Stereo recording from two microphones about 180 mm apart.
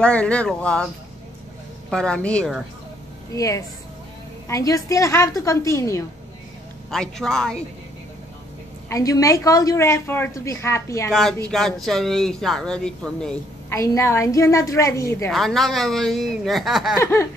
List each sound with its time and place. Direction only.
0.0 s a woman's voice: 5° left (ahead or behind)
1.9 s speech: 5° left (ahead or behind)
3.3 s a woman's voice: 20° left (ahead or behind)
6.9 s speech: centre (ahead or behind)
8.8 s a woman's voice: 20° left (ahead or behind)
11.1 s speech: centre (ahead or behind)
13.7 s a woman's voice: 15° left (ahead or behind)
15.3 s speech: centre (ahead or behind)
17.0 s a woman's voice: 15° left (ahead or behind)